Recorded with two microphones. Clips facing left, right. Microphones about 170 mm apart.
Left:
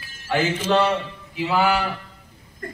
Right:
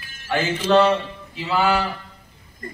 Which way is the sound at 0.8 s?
15° left (ahead or behind).